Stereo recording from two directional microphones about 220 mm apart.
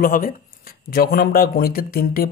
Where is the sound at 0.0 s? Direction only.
40° left (ahead or behind).